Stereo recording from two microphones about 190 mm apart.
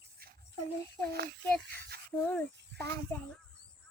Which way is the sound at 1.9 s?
55° right (ahead or behind).